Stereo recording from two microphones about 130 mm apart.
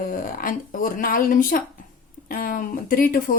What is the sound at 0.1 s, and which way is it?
Speech, 90° left.